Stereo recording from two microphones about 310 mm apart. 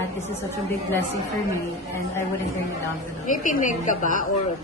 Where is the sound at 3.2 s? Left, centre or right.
Left.